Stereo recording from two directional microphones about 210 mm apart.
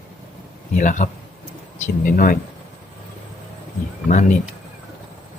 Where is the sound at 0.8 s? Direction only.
35° left (ahead or behind).